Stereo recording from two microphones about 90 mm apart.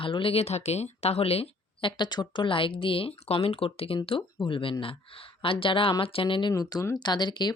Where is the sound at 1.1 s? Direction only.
90° left.